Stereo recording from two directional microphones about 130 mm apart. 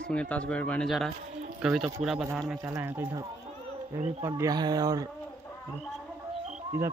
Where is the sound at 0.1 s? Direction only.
10° left (ahead or behind).